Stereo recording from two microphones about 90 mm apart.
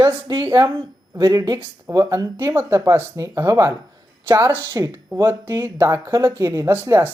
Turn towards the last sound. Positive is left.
turn(degrees=-25)  # may be behind; listen again after turning